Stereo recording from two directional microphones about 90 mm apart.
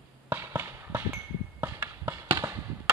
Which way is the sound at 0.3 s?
25° right (ahead or behind).